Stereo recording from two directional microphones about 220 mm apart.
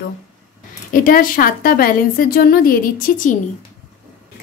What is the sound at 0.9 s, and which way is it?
A woman's voice, 40° left (ahead or behind).